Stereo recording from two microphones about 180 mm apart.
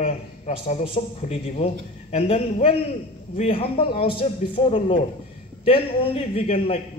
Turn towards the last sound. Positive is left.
turn(degrees=30)  # may be behind; listen again after turning